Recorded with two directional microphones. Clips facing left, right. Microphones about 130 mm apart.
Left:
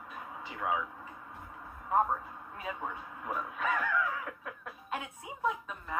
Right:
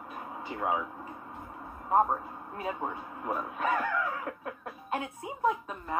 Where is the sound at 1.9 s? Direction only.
40° right (ahead or behind).